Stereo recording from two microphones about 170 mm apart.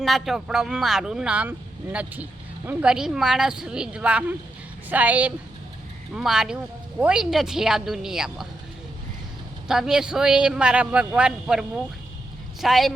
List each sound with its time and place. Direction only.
0.0 s a woman's voice: centre (ahead or behind)
9.6 s speech: 5° right (ahead or behind)
12.6 s speech: centre (ahead or behind)